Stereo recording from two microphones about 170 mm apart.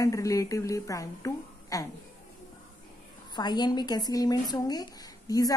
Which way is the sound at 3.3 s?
25° left (ahead or behind).